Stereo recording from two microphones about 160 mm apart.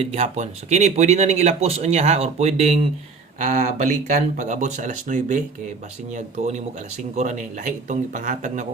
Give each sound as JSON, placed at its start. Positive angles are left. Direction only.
{"t": 0.0, "sound": "speech", "side_deg": -40}
{"t": 3.3, "sound": "speech", "side_deg": -55}